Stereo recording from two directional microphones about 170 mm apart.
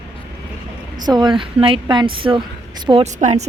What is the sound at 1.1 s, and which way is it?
Speech, 25° right (ahead or behind).